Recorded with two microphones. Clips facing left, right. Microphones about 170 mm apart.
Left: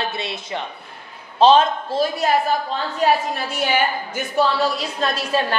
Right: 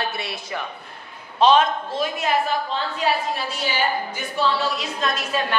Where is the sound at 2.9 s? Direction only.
50° left (ahead or behind).